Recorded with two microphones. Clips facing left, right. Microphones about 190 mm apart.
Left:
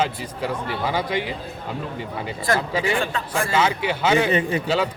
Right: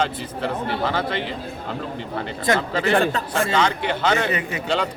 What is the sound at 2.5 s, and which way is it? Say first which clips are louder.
Speech: right 2 dB; 20° right (ahead or behind).